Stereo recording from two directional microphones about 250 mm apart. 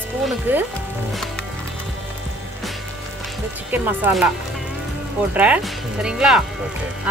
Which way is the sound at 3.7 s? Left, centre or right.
Centre.